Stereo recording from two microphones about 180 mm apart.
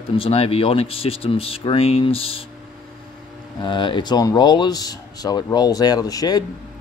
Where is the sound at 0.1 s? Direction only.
30° left (ahead or behind).